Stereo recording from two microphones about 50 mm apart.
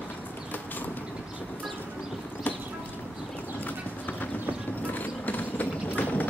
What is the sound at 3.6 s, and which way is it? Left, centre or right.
Clip-clop, left.